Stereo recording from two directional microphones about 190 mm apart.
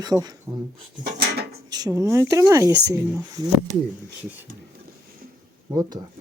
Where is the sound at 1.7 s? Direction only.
20° right (ahead or behind).